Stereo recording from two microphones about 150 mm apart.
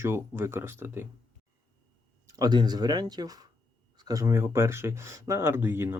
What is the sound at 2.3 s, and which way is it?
Speech, 25° right (ahead or behind).